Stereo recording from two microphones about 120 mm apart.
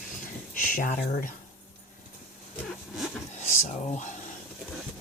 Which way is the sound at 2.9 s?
Centre (ahead or behind).